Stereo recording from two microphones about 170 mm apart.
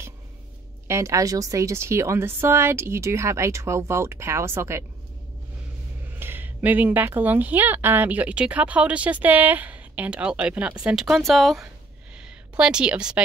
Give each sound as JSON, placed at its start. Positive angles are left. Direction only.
{"t": 0.8, "sound": "speech", "side_deg": -15}
{"t": 6.1, "sound": "speech", "side_deg": -10}